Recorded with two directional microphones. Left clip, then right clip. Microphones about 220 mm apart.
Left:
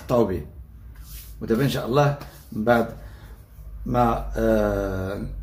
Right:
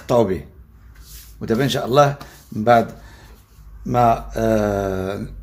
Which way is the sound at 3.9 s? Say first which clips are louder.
Right 6 dB; 40° right (ahead or behind).